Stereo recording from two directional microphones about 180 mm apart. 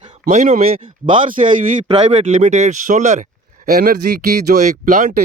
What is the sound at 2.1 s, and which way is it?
Speech, 35° right (ahead or behind).